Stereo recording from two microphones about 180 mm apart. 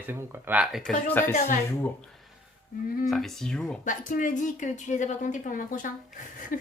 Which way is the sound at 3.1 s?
Centre (ahead or behind).